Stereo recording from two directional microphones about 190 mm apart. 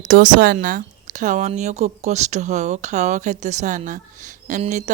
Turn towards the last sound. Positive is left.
turn(degrees=-40)  # may be behind; listen again after turning